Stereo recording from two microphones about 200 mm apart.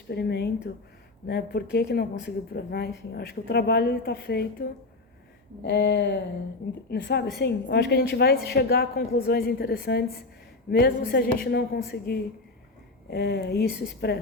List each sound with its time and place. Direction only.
0.1 s a woman's voice: 55° left (ahead or behind)
5.6 s a woman's voice: 60° left (ahead or behind)